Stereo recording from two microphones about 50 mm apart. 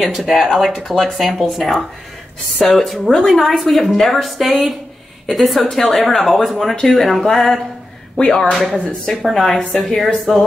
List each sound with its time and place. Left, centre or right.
0.0 s speech: centre